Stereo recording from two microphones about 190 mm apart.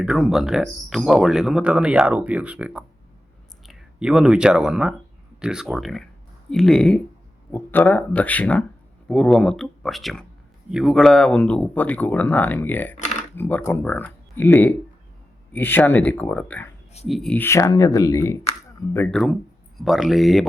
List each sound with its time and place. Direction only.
0.0 s speech: centre (ahead or behind); by 18.3 s 15° left (ahead or behind)
18.9 s speech: 5° left (ahead or behind)